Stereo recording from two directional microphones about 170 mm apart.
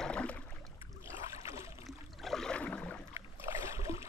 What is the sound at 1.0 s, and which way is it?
Boat, 15° right (ahead or behind).